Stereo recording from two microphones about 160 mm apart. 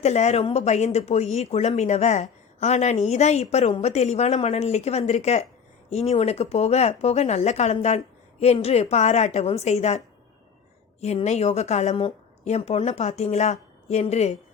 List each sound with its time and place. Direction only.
0.0 s a woman's voice: 45° left (ahead or behind)
11.0 s a woman's voice: 45° left (ahead or behind)